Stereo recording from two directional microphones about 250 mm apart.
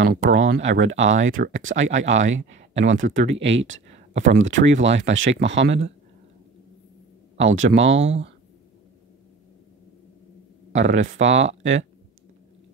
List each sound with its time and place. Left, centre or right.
0.0 s speech: right
7.3 s speech: right
10.8 s speech: right